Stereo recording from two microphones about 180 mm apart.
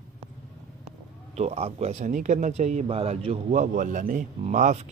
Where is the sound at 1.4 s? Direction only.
35° right (ahead or behind).